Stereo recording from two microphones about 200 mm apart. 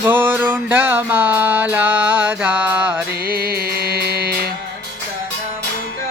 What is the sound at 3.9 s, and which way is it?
Music, 50° right (ahead or behind).